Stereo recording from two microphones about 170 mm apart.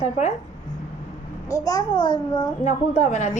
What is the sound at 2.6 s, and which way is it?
Speech, 45° left (ahead or behind).